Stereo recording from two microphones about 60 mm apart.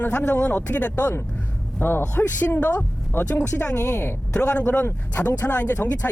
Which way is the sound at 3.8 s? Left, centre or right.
Left.